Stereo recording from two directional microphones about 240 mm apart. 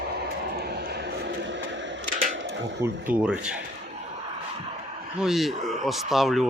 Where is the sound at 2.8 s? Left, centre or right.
Centre.